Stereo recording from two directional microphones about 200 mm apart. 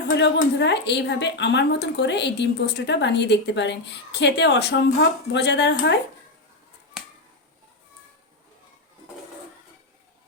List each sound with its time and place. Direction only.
0.2 s a woman's voice: 60° left (ahead or behind)
7.0 s finger snapping: 5° right (ahead or behind)